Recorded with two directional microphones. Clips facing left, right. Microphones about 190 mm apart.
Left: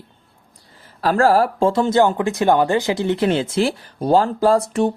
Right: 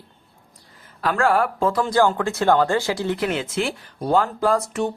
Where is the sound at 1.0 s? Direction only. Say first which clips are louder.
Left 4 dB; 35° left (ahead or behind).